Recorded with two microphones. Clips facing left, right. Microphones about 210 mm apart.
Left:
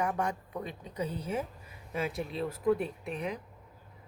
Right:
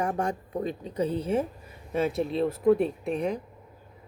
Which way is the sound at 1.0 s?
30° right (ahead or behind).